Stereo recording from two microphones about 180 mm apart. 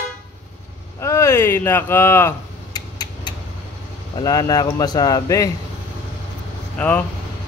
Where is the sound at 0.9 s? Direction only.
15° left (ahead or behind).